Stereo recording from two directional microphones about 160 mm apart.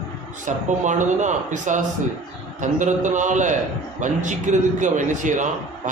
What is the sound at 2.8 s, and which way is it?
A man's voice, 50° right (ahead or behind).